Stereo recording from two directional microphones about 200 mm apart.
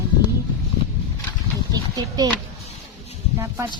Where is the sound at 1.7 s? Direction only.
20° right (ahead or behind).